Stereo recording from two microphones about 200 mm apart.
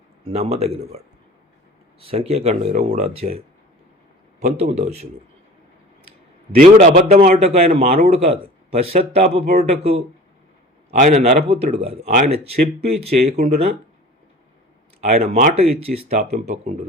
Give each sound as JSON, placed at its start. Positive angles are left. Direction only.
{"t": 0.3, "sound": "speech", "side_deg": -30}
{"t": 6.6, "sound": "speech", "side_deg": -35}
{"t": 15.0, "sound": "speech", "side_deg": -30}